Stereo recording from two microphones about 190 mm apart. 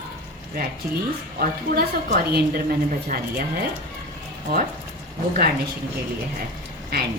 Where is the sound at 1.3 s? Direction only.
55° right (ahead or behind).